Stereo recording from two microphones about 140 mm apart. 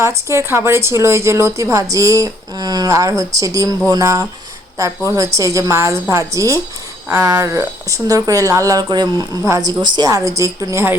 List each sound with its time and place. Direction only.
0.0 s a woman's voice: 20° right (ahead or behind)